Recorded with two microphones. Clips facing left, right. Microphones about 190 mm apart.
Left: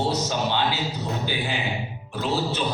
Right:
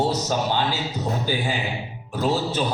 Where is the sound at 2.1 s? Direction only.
45° right (ahead or behind).